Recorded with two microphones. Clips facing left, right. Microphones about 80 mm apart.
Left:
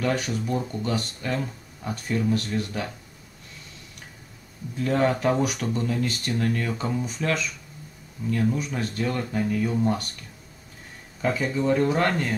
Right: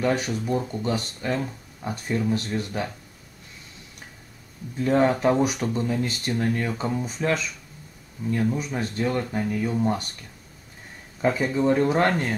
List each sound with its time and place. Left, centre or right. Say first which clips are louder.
0.0 s speech: right 2 dB; right
4.7 s speech: right 2 dB; centre
11.1 s speech: right 2 dB; centre